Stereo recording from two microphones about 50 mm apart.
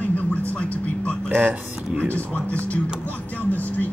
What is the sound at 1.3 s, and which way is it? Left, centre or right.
Speech, right.